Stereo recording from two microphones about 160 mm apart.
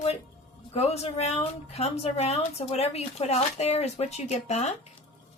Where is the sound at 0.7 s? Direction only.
40° left (ahead or behind).